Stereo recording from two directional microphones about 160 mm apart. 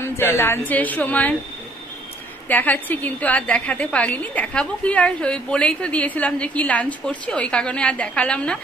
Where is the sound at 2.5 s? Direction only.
10° left (ahead or behind).